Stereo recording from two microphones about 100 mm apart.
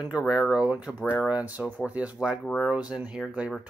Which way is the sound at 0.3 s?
10° right (ahead or behind).